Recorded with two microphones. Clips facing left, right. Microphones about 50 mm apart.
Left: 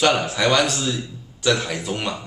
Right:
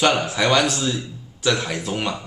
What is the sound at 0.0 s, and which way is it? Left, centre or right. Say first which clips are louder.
A man's voice: even; centre.